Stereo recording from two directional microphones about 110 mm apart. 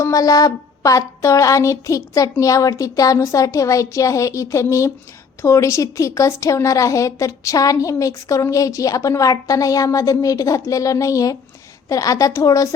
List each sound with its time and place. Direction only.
0.0 s speech: 30° left (ahead or behind)